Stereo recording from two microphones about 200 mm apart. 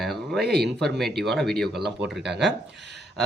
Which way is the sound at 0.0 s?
Centre (ahead or behind).